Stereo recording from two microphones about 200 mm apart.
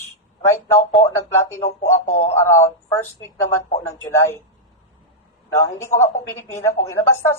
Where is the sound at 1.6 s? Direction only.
35° left (ahead or behind).